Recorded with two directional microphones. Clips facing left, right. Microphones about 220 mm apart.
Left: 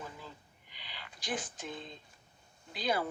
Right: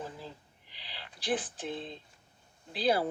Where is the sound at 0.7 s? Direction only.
30° right (ahead or behind).